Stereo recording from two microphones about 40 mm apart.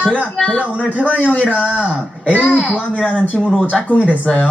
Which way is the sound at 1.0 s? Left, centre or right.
Left.